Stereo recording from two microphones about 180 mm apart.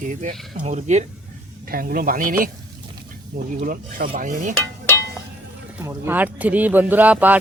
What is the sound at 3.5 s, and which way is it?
Speech, 50° right (ahead or behind).